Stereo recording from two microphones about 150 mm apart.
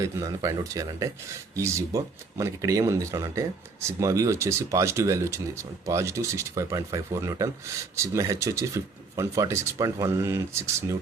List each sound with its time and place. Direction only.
0.0 s speech: 20° right (ahead or behind)